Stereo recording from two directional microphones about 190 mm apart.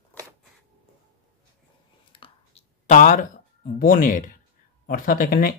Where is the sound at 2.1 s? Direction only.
25° left (ahead or behind).